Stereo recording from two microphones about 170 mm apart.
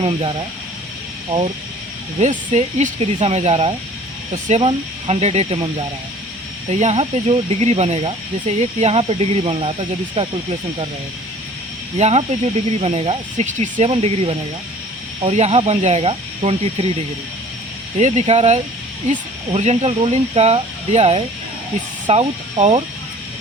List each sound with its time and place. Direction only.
0.0 s speech: 30° right (ahead or behind)
2.2 s speech: 45° right (ahead or behind)
6.7 s speech: 40° right (ahead or behind)
11.9 s speech: 40° right (ahead or behind)
18.0 s speech: 40° right (ahead or behind)